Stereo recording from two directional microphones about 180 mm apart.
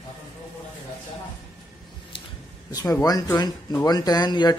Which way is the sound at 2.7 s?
20° left (ahead or behind).